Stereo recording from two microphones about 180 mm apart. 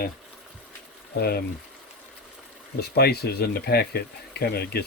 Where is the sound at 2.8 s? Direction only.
60° left (ahead or behind).